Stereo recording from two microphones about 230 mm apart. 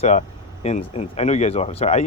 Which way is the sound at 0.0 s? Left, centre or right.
Left.